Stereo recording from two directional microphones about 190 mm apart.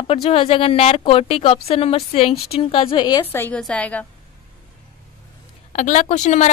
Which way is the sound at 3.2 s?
10° left (ahead or behind).